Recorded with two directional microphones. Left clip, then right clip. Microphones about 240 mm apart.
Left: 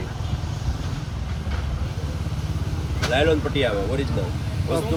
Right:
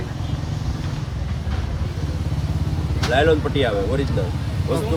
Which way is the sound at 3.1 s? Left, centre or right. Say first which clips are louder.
Right 3 dB; centre.